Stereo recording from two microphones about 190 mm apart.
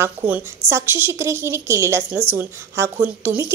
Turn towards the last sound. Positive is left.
turn(degrees=-10)  # may be behind; listen again after turning